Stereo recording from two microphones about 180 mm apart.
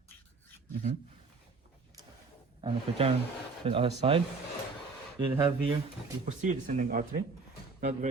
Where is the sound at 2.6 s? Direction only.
30° right (ahead or behind).